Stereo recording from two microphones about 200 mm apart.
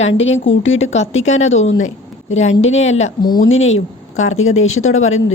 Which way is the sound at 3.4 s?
80° left.